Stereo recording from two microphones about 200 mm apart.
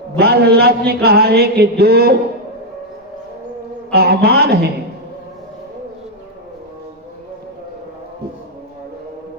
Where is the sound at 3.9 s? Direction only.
50° right (ahead or behind).